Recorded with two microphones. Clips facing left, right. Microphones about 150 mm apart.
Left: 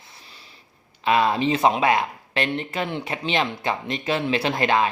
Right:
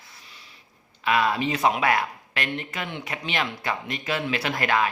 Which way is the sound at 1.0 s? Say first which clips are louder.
Left 3 dB; 25° left (ahead or behind).